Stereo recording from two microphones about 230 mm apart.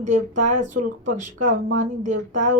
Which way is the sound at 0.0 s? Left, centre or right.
Right.